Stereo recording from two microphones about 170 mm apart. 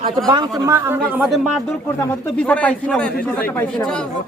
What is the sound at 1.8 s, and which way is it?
A man's voice, 15° left (ahead or behind).